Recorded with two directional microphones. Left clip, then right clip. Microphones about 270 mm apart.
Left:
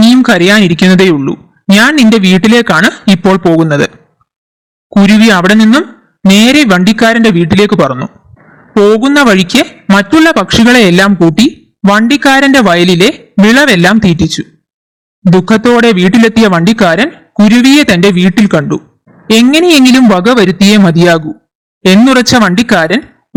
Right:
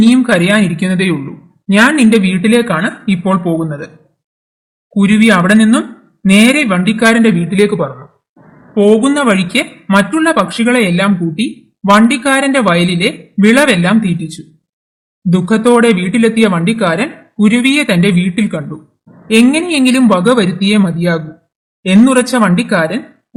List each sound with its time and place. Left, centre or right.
0.0 s a woman's voice: left
5.0 s a woman's voice: left